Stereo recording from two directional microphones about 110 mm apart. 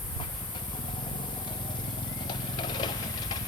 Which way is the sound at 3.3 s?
35° left (ahead or behind).